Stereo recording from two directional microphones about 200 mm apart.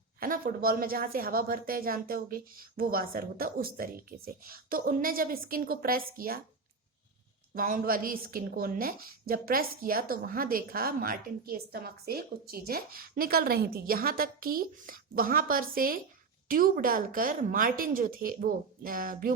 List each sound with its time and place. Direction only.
0.2 s a woman's voice: 45° right (ahead or behind)
7.5 s a woman's voice: 45° right (ahead or behind)